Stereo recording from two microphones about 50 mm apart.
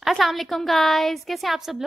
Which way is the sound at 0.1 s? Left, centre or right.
Centre.